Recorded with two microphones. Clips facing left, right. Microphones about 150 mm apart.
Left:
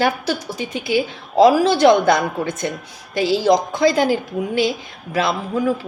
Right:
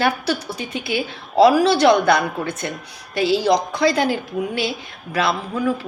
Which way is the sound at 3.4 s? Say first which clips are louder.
Left 2 dB; 45° left (ahead or behind).